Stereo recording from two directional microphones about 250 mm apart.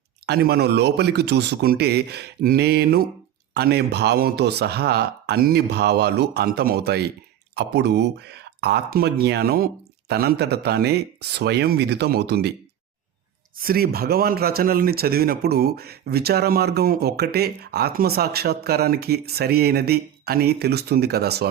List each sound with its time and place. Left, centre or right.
0.3 s speech: right
13.6 s speech: right